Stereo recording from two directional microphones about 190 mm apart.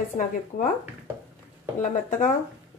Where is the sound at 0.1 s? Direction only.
40° left (ahead or behind).